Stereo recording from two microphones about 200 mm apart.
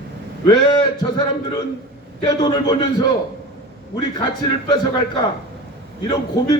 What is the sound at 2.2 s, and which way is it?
Speech, 20° left (ahead or behind).